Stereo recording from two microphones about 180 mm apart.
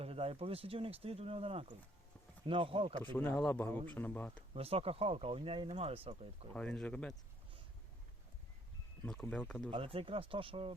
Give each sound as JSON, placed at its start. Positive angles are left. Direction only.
{"t": 0.0, "sound": "speech", "side_deg": -35}
{"t": 3.0, "sound": "speech", "side_deg": 10}
{"t": 4.5, "sound": "speech", "side_deg": -35}
{"t": 6.5, "sound": "speech", "side_deg": 5}
{"t": 9.0, "sound": "speech", "side_deg": 5}
{"t": 9.6, "sound": "speech", "side_deg": -30}